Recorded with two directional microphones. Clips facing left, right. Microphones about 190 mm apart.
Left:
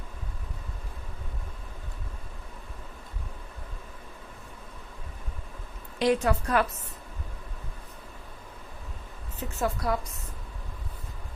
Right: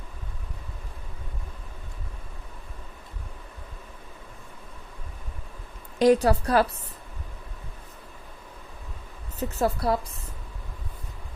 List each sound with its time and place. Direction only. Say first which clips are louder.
6.0 s a woman's voice: right 5 dB; 40° right (ahead or behind)
9.4 s a woman's voice: right 4 dB; 35° right (ahead or behind)